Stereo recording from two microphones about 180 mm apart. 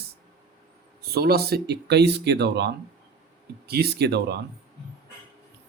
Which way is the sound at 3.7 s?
60° right (ahead or behind).